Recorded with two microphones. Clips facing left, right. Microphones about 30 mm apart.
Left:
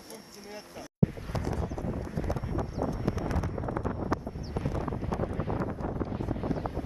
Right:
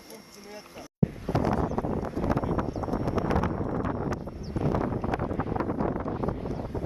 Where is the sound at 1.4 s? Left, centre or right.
Right.